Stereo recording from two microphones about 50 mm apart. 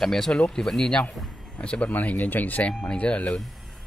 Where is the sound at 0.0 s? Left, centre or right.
Centre.